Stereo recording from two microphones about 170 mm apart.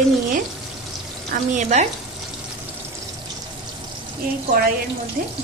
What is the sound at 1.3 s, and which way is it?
Speech, 45° right (ahead or behind).